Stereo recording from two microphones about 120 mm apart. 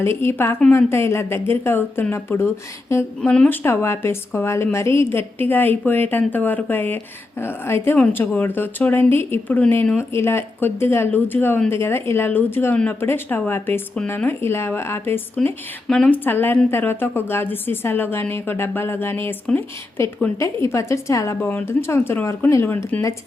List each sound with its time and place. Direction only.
0.0 s a woman's voice: 20° left (ahead or behind)
3.2 s a woman's voice: 10° left (ahead or behind); by 23.1 s 25° left (ahead or behind)